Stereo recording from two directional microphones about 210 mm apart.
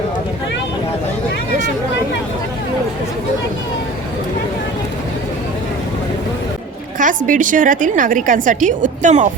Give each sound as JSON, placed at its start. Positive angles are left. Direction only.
{"t": 7.3, "sound": "a woman's voice", "side_deg": -40}